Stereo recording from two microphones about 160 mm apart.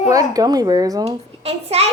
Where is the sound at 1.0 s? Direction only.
40° right (ahead or behind).